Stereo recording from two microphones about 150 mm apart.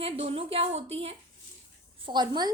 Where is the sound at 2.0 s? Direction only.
30° right (ahead or behind).